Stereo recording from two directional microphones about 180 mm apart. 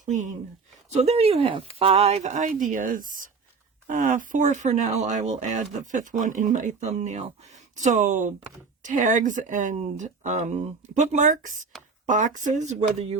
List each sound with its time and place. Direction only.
0.0 s speech: 45° right (ahead or behind)
1.0 s speech: 35° right (ahead or behind)